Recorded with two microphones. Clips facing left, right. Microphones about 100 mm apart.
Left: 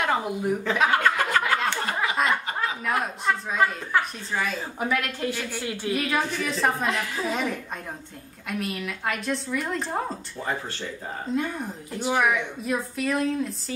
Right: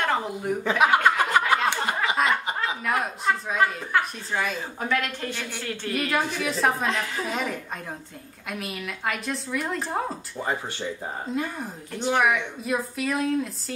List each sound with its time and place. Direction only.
0.0 s speech: 5° left (ahead or behind)
0.7 s speech: 15° right (ahead or behind)
2.2 s chuckle: centre (ahead or behind)
2.8 s a woman's voice: centre (ahead or behind)
4.7 s a woman's voice: 10° left (ahead or behind)
11.3 s a woman's voice: centre (ahead or behind)